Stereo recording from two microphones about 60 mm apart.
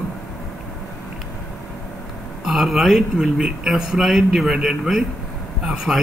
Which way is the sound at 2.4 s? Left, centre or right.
Centre.